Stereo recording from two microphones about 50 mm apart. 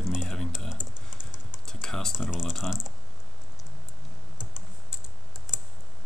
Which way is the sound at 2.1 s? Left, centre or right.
Centre.